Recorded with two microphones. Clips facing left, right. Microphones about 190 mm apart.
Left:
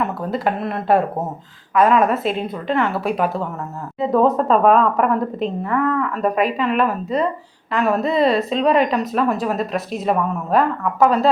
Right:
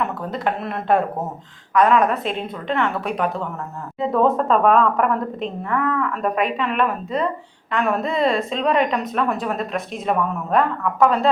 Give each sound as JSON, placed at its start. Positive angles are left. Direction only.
{"t": 0.0, "sound": "a woman's voice", "side_deg": 5}